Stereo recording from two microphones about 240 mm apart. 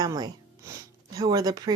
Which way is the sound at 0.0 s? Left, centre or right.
Centre.